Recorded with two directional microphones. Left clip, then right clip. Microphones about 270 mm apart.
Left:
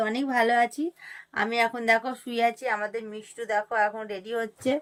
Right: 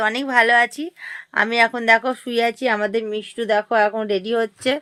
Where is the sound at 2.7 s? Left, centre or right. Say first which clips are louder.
Right 9 dB; right.